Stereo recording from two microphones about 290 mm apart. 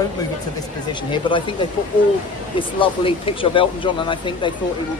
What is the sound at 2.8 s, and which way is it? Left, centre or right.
Speech, centre.